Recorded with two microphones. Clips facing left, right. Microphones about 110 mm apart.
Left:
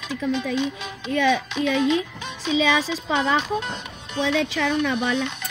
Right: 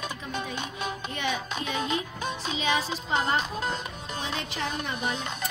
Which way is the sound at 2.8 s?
90° left.